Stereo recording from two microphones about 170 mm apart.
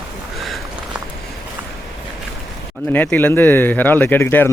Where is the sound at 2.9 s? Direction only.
10° left (ahead or behind).